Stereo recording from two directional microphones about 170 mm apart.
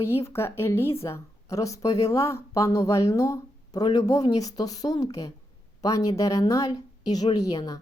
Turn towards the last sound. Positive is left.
turn(degrees=25)  # may be behind; listen again after turning